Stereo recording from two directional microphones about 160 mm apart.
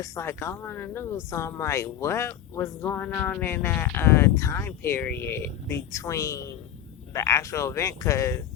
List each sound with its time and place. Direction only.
0.0 s speech: 15° left (ahead or behind)